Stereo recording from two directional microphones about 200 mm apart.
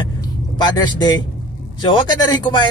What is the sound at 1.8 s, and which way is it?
Speech, 25° left (ahead or behind).